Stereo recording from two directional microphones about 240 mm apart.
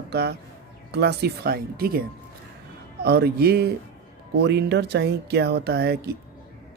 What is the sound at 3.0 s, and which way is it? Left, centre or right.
Speech, right.